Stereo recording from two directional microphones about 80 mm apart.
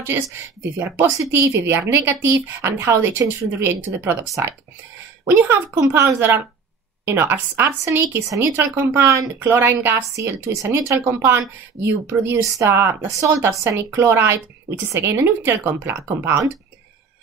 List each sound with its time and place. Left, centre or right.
0.0 s a woman's voice: right
9.5 s a woman's voice: right
10.1 s speech: right